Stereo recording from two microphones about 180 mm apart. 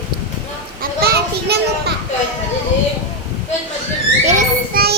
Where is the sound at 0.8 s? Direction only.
60° right (ahead or behind).